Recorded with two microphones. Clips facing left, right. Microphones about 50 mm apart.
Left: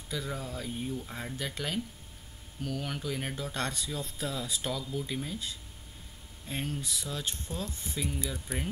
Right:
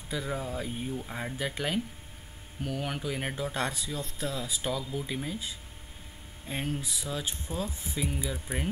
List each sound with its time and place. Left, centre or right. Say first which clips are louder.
0.1 s speech: right 3 dB; centre